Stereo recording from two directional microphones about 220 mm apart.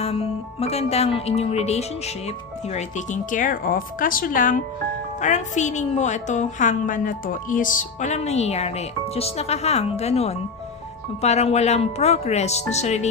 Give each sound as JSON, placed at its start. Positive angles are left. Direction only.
{"t": 0.0, "sound": "a woman's voice", "side_deg": 25}